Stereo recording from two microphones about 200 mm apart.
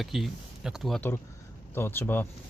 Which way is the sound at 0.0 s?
Centre (ahead or behind).